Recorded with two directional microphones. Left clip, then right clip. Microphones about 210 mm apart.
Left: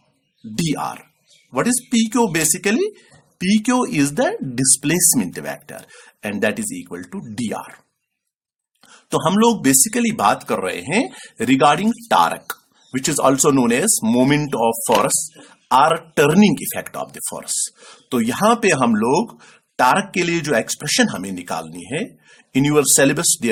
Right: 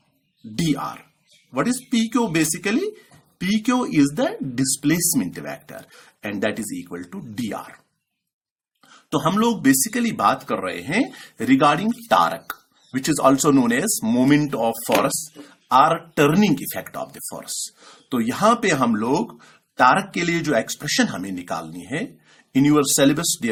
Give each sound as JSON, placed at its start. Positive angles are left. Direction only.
{"t": 0.5, "sound": "speech", "side_deg": 35}
{"t": 8.9, "sound": "speech", "side_deg": 30}